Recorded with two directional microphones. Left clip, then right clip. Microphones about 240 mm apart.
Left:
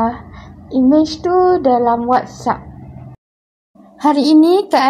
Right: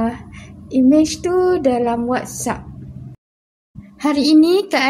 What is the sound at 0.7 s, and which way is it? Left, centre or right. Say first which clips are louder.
Speech: left 1 dB; centre.